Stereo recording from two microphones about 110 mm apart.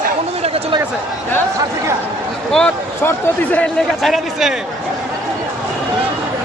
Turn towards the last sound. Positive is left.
turn(degrees=0)  # may be behind; listen again after turning